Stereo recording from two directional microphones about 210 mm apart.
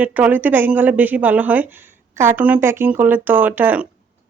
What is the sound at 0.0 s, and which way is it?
Speech, 5° right (ahead or behind).